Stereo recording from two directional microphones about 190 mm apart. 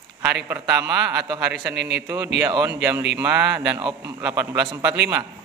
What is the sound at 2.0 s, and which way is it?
A man's voice, 10° right (ahead or behind).